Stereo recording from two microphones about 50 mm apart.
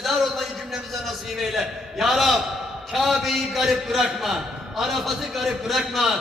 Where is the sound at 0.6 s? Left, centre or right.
Centre.